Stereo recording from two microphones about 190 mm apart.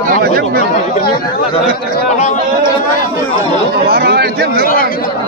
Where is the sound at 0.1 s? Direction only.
55° right (ahead or behind).